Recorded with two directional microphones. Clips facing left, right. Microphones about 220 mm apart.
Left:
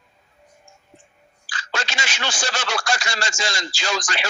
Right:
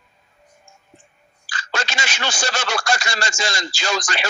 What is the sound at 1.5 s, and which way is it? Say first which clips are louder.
Speech: right 2 dB; 45° right (ahead or behind).